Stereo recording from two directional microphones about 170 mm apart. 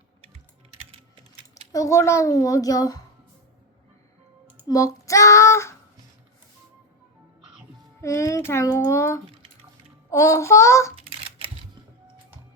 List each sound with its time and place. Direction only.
1.7 s a child's voice: 20° left (ahead or behind)
4.7 s a child's voice: 20° left (ahead or behind)
8.0 s a child's voice: 15° left (ahead or behind)
11.2 s a sound: 35° right (ahead or behind)